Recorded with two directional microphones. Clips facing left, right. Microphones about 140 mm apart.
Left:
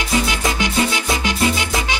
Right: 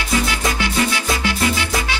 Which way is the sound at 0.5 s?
20° left (ahead or behind).